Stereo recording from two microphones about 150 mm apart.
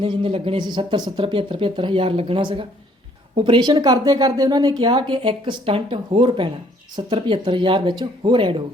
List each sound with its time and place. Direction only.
0.0 s speech: 35° right (ahead or behind)